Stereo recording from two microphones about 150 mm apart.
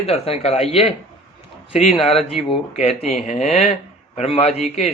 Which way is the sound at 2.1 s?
40° left (ahead or behind).